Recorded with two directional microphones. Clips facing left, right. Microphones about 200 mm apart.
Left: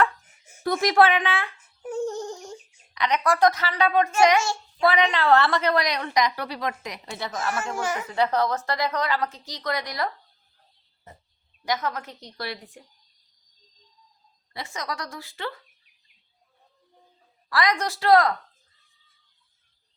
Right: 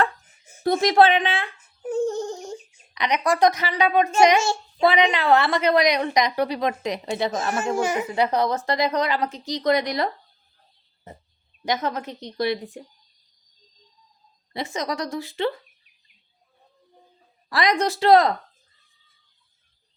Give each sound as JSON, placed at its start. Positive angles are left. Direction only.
{"t": 0.0, "sound": "speech", "side_deg": -25}
{"t": 11.6, "sound": "speech", "side_deg": -20}
{"t": 14.5, "sound": "speech", "side_deg": -20}
{"t": 17.5, "sound": "speech", "side_deg": -20}